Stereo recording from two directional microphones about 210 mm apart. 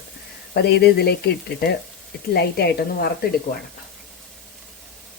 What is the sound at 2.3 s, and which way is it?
Speech, 50° left (ahead or behind).